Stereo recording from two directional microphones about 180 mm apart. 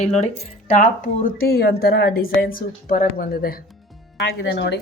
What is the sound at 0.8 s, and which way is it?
Speech, 50° left (ahead or behind).